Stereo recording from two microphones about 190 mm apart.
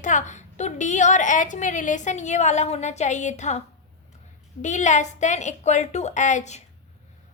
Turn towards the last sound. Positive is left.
turn(degrees=35)  # may be behind; listen again after turning